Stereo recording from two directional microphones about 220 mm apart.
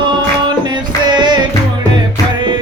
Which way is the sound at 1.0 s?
20° right (ahead or behind).